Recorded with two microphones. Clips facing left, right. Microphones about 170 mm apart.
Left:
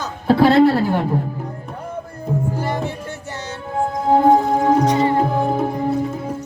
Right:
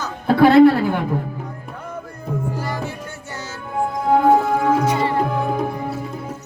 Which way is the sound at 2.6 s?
30° left (ahead or behind).